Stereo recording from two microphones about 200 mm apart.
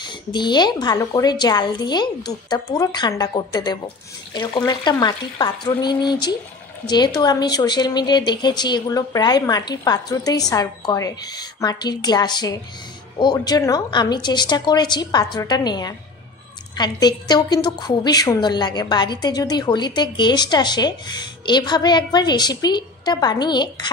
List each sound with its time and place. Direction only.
0.0 s a woman's voice: 20° left (ahead or behind)